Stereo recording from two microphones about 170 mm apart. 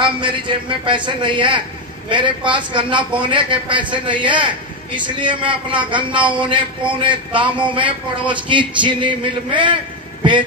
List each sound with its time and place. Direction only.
0.0 s a man's voice: 30° right (ahead or behind)